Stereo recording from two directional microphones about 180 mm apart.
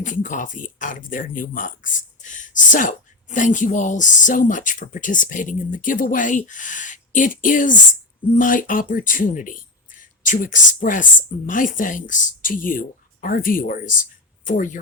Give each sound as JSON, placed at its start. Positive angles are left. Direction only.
{"t": 0.0, "sound": "a woman's voice", "side_deg": 45}